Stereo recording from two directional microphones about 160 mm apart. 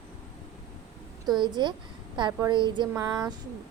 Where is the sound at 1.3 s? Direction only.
25° right (ahead or behind).